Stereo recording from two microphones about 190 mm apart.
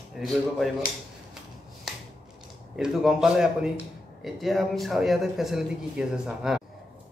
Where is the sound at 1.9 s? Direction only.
Centre (ahead or behind).